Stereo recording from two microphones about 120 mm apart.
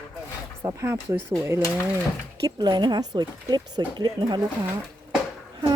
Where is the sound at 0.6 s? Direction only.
25° right (ahead or behind).